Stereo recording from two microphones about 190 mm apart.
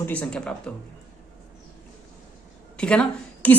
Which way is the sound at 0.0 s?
5° left (ahead or behind).